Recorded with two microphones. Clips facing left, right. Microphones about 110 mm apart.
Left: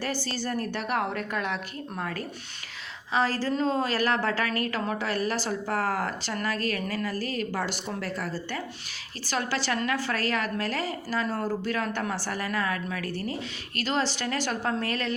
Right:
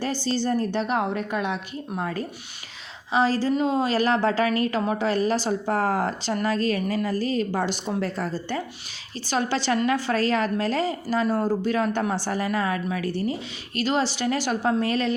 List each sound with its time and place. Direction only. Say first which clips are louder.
0.0 s a woman's voice: right 6 dB; 25° right (ahead or behind)